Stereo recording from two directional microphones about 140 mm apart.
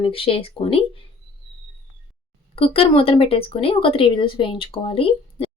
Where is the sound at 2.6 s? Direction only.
40° left (ahead or behind).